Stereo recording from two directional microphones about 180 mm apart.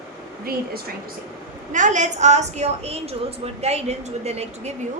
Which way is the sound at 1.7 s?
45° right (ahead or behind).